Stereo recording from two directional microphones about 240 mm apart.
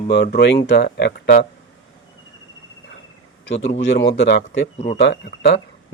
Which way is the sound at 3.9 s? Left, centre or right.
Left.